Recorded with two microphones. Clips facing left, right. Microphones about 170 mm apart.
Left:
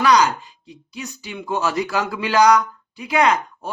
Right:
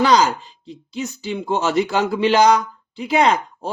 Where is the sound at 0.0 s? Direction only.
30° right (ahead or behind).